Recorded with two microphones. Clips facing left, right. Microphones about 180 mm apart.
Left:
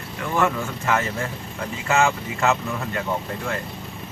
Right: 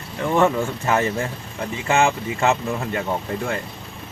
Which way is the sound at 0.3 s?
30° right (ahead or behind).